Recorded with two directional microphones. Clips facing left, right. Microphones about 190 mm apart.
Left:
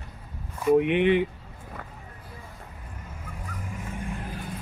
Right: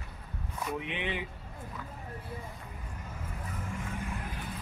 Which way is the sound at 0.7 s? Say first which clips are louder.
Left 17 dB; 60° left (ahead or behind).